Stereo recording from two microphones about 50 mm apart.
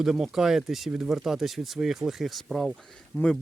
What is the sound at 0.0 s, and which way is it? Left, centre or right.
Speech, centre.